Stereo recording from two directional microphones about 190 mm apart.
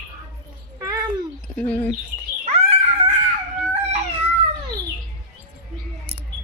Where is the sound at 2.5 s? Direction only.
35° right (ahead or behind).